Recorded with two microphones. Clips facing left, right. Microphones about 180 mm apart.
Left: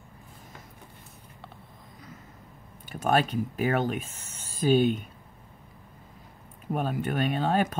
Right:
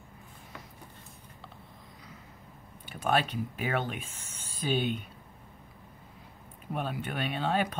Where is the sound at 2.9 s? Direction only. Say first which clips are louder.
Left 4 dB; 45° left (ahead or behind).